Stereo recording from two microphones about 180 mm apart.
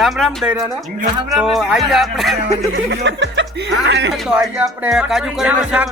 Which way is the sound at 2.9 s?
75° right (ahead or behind).